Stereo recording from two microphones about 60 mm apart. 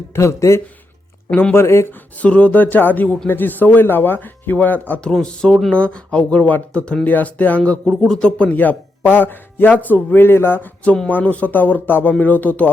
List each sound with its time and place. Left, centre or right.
0.1 s speech: left
1.9 s speech: left
4.9 s speech: centre
7.9 s speech: centre
8.4 s speech: left
10.8 s speech: centre
11.2 s speech: left